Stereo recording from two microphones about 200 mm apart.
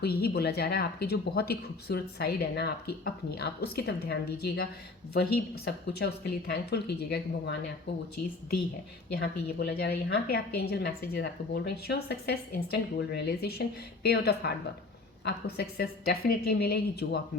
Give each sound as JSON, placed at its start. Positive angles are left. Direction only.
{"t": 0.0, "sound": "speech", "side_deg": 50}
{"t": 9.1, "sound": "speech", "side_deg": 55}